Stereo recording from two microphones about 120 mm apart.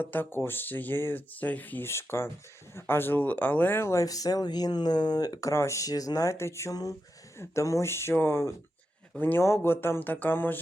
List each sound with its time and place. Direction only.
0.0 s speech: 15° left (ahead or behind)